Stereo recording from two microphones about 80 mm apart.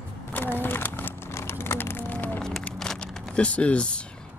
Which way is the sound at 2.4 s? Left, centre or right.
Centre.